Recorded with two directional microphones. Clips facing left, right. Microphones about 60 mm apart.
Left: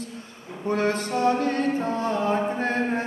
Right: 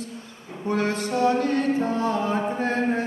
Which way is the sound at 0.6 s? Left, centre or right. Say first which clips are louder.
Left 1 dB; left.